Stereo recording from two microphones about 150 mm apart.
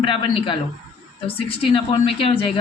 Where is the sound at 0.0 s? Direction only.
35° left (ahead or behind).